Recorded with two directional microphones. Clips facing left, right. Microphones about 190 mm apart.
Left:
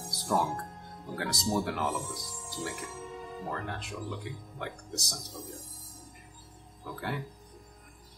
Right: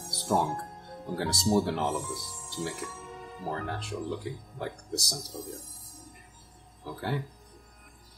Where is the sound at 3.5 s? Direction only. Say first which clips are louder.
Right 5 dB; 30° right (ahead or behind).